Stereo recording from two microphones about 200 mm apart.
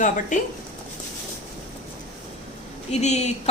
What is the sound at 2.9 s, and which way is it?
Speech, 35° left (ahead or behind).